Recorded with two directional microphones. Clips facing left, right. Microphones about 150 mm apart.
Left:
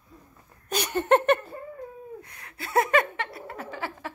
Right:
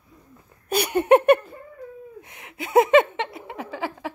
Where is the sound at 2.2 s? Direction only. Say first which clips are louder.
Right 6 dB; 20° right (ahead or behind).